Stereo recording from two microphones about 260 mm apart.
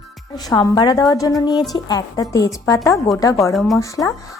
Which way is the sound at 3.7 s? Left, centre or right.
Centre.